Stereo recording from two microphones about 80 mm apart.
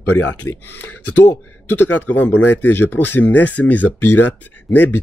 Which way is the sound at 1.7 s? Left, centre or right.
Left.